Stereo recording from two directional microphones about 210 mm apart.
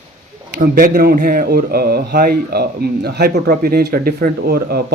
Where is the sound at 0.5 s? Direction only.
45° right (ahead or behind).